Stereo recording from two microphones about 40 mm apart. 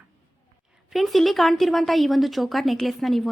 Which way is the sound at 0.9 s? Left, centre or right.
Centre.